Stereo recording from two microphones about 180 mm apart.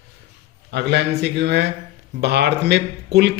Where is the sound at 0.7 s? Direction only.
70° right (ahead or behind).